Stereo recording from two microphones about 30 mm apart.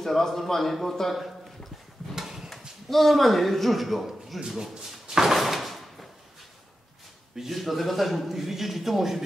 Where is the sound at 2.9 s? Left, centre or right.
Centre.